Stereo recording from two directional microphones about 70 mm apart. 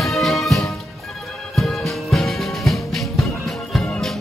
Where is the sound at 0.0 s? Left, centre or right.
Centre.